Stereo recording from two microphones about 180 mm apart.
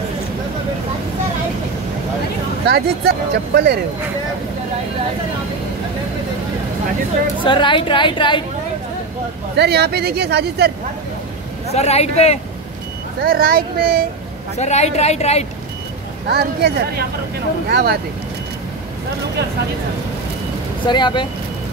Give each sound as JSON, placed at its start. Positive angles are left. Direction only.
{"t": 2.7, "sound": "speech", "side_deg": -60}
{"t": 7.4, "sound": "a woman's voice", "side_deg": 25}
{"t": 9.6, "sound": "speech", "side_deg": -65}
{"t": 11.7, "sound": "a woman's voice", "side_deg": 35}
{"t": 13.2, "sound": "speech", "side_deg": -55}
{"t": 14.6, "sound": "a woman's voice", "side_deg": 40}
{"t": 16.3, "sound": "speech", "side_deg": -65}
{"t": 20.8, "sound": "a woman's voice", "side_deg": 25}